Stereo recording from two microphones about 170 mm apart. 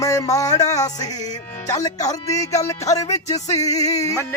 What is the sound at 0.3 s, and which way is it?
Speech, 20° left (ahead or behind).